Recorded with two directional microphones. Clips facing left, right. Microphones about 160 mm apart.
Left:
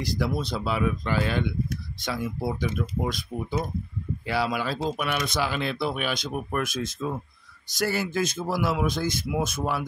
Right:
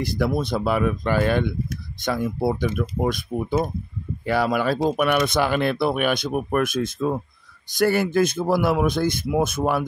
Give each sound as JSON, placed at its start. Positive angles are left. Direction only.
{"t": 0.0, "sound": "speech", "side_deg": -55}